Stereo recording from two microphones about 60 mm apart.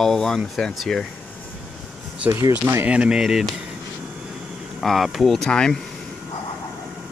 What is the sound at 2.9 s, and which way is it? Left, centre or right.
Speech, centre.